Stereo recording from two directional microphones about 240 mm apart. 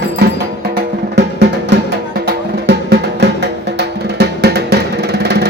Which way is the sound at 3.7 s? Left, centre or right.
Right.